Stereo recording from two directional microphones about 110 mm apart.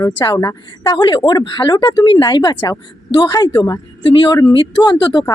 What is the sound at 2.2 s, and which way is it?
A woman's voice, 35° left (ahead or behind).